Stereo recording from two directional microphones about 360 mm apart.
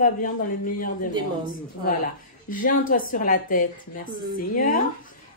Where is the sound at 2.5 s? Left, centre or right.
Left.